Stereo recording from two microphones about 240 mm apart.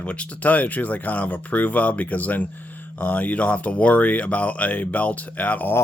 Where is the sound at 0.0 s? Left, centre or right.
Centre.